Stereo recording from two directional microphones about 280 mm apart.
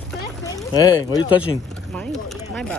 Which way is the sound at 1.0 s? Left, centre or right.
Centre.